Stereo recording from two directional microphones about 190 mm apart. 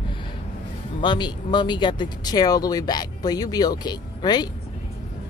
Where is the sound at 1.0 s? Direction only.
25° left (ahead or behind).